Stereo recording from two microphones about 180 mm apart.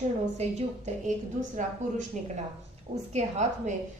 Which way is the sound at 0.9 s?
45° right (ahead or behind).